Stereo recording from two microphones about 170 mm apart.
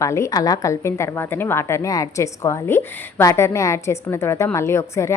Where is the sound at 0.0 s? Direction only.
20° left (ahead or behind).